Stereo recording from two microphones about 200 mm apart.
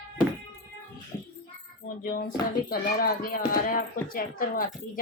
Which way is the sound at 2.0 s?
45° left (ahead or behind).